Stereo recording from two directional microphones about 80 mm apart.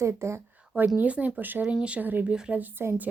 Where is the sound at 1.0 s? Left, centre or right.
Centre.